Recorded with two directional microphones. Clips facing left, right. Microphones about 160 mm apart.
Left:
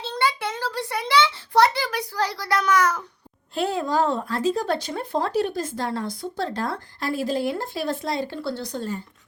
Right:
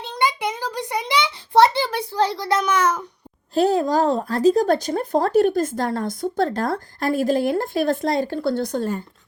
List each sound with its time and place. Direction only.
0.0 s a child's voice: 15° right (ahead or behind)
3.5 s speech: 40° right (ahead or behind)